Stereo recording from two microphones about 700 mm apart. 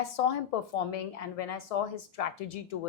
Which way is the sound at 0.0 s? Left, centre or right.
Left.